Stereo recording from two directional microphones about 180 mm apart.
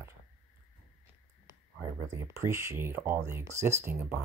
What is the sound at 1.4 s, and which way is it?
Speech, 15° right (ahead or behind).